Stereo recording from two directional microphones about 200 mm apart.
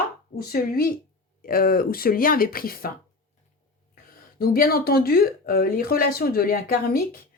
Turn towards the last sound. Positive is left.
turn(degrees=45)  # may be behind; listen again after turning